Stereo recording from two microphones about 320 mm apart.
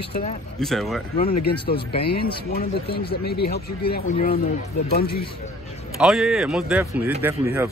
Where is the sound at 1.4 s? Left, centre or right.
Left.